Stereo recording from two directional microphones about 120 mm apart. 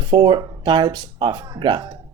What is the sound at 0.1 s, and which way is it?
Speech, 40° right (ahead or behind).